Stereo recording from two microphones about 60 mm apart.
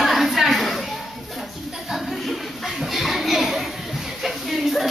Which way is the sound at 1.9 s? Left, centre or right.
Centre.